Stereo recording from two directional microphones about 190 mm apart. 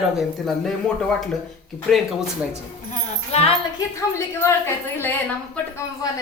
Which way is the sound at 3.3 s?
30° left (ahead or behind).